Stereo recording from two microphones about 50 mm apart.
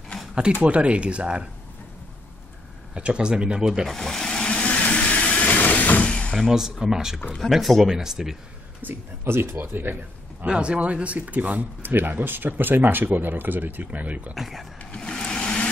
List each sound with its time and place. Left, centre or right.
0.6 s speech: right
2.9 s speech: right
3.8 s speech: centre
4.5 s vehicle: left
6.3 s speech: centre
7.3 s speech: centre
8.8 s speech: right
10.4 s speech: right
14.3 s speech: centre
14.9 s a sound: left